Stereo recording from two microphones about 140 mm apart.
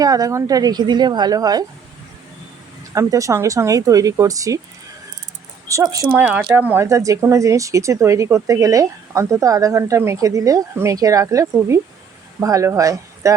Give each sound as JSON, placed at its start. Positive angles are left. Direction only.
{"t": 0.0, "sound": "speech", "side_deg": -25}
{"t": 2.9, "sound": "speech", "side_deg": -25}
{"t": 5.6, "sound": "speech", "side_deg": -25}
{"t": 6.1, "sound": "speech", "side_deg": -10}